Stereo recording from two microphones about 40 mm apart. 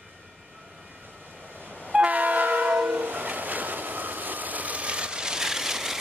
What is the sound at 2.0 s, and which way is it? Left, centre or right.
Train, right.